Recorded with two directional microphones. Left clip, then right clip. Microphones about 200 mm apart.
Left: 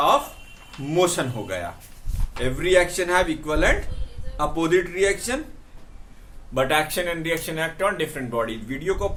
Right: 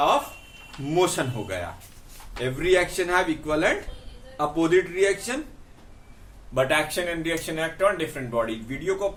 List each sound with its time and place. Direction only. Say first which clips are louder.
0.9 s speech: left 2 dB; 10° left (ahead or behind)
6.5 s speech: left 1 dB; 15° left (ahead or behind)